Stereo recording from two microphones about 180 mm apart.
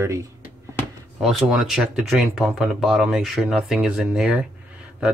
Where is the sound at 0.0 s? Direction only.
15° right (ahead or behind).